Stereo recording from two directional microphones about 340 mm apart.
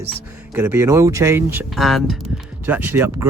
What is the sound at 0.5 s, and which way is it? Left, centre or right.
Speech, centre.